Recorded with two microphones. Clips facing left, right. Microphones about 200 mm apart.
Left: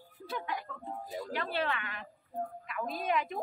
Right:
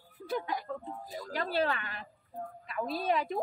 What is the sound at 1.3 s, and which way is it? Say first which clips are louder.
A woman's voice: right 4 dB; 40° right (ahead or behind).